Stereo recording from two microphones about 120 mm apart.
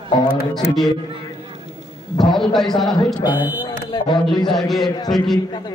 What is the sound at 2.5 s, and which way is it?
Speech, centre (ahead or behind).